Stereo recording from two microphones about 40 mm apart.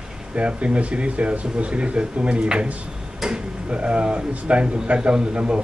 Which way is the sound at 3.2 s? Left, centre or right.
Centre.